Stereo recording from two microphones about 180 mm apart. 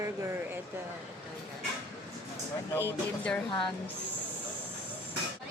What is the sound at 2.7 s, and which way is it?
Speech, 10° left (ahead or behind).